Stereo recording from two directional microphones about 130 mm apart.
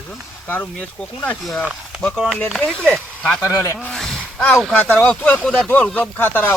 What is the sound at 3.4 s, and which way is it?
Speech, 20° left (ahead or behind).